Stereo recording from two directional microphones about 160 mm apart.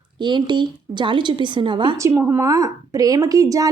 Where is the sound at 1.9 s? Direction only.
15° right (ahead or behind).